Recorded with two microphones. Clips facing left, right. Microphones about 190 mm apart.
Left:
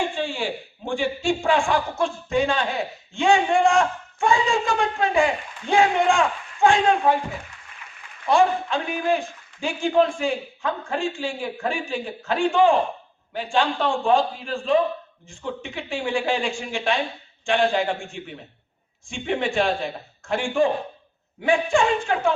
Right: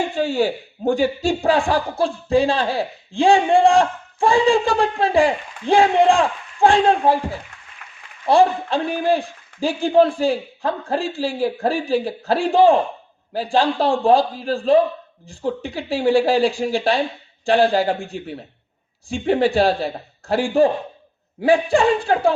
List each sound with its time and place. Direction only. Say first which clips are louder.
0.0 s speech: right 6 dB; 40° right (ahead or behind)
7.8 s a sound: right 2 dB; 60° right (ahead or behind)
8.3 s speech: right 4 dB; 35° right (ahead or behind)